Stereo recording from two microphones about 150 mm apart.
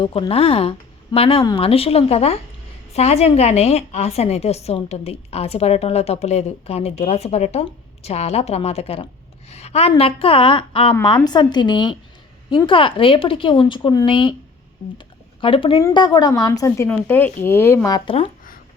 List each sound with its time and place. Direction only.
0.0 s a woman's voice: 35° left (ahead or behind)
9.5 s a sound: 45° left (ahead or behind)
10.0 s a woman's voice: 40° left (ahead or behind)